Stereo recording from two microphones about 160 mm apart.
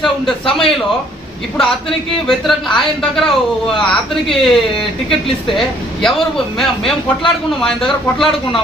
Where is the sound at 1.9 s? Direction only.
Centre (ahead or behind).